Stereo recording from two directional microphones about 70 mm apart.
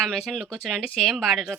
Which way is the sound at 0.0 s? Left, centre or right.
Centre.